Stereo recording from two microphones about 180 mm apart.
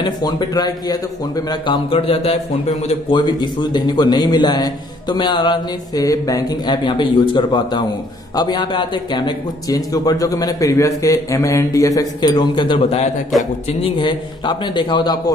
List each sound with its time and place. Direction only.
0.0 s a man's voice: 25° left (ahead or behind)